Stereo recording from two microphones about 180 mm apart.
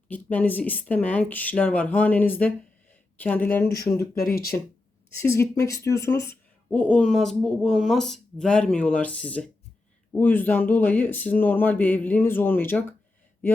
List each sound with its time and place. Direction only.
0.1 s speech: 10° left (ahead or behind)
4.2 s speech: 55° left (ahead or behind)
5.1 s speech: 15° left (ahead or behind)